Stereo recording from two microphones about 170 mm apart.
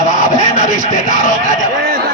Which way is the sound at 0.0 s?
45° left (ahead or behind).